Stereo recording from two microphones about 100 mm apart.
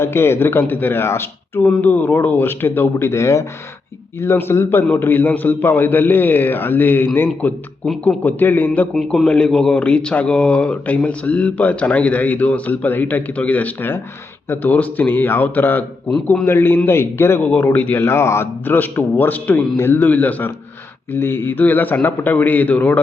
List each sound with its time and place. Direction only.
0.0 s a man's voice: 25° left (ahead or behind)
1.6 s a man's voice: 15° left (ahead or behind)
9.0 s a man's voice: 5° left (ahead or behind)
16.2 s a man's voice: 10° left (ahead or behind)
16.5 s a man's voice: 20° left (ahead or behind)